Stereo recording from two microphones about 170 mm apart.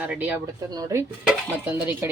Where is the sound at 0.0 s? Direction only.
10° right (ahead or behind).